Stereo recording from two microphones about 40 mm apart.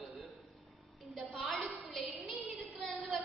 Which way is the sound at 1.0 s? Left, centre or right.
Centre.